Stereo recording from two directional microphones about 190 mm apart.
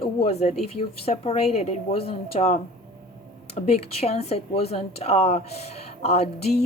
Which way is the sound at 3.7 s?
35° left (ahead or behind).